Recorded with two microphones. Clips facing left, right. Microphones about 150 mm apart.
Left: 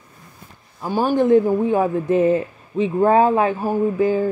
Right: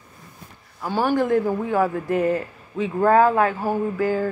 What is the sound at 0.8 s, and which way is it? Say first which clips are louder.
A man's voice: left 4 dB; 15° left (ahead or behind).